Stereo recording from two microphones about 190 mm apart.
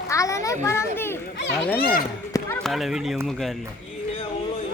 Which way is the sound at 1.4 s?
65° left (ahead or behind).